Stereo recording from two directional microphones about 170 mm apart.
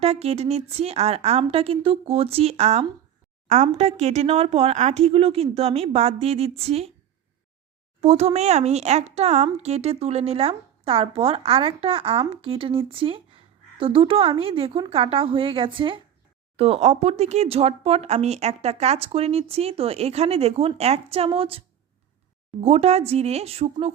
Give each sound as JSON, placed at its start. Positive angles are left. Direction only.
{"t": 0.0, "sound": "speech", "side_deg": -40}
{"t": 8.0, "sound": "speech", "side_deg": -40}
{"t": 22.6, "sound": "speech", "side_deg": -40}